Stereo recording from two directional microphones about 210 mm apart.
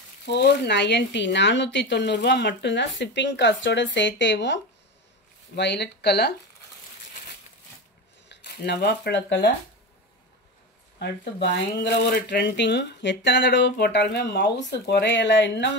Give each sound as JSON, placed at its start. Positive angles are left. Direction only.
{"t": 0.2, "sound": "speech", "side_deg": 50}
{"t": 5.6, "sound": "speech", "side_deg": 55}
{"t": 8.3, "sound": "speech", "side_deg": 50}
{"t": 11.0, "sound": "speech", "side_deg": 55}